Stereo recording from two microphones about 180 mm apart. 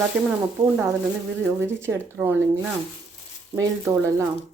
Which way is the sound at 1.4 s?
15° right (ahead or behind).